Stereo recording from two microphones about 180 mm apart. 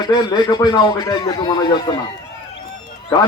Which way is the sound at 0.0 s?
25° left (ahead or behind).